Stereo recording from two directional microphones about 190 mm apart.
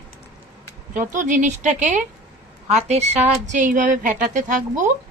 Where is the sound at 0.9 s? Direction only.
40° right (ahead or behind).